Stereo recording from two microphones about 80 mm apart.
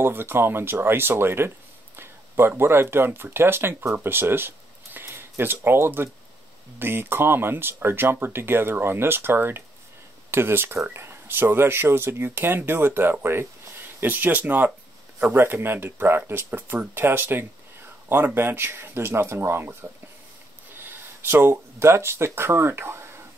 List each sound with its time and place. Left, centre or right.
0.0 s speech: right